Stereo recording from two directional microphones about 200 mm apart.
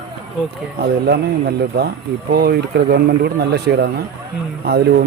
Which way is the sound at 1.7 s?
50° right (ahead or behind).